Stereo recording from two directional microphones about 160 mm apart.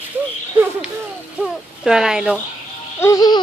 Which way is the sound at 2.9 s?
20° left (ahead or behind).